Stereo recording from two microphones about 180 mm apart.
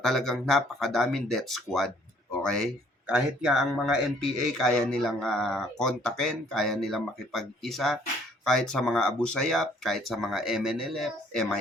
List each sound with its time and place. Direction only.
0.0 s a man's voice: centre (ahead or behind)
2.3 s a sound: 5° left (ahead or behind)
3.1 s a man's voice: 5° right (ahead or behind)